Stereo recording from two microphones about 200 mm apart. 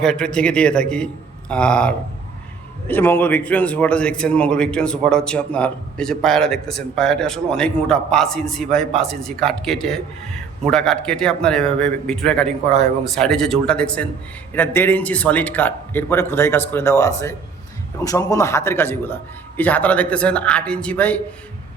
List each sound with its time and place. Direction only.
0.0 s a man's voice: 5° left (ahead or behind)